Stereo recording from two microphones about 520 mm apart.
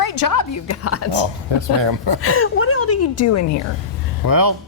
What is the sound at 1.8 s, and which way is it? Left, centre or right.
Speech, right.